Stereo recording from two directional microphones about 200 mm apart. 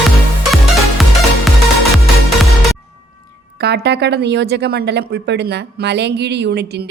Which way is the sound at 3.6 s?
55° right (ahead or behind).